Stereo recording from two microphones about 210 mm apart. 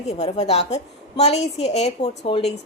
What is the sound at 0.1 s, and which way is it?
A woman's voice, 30° left (ahead or behind).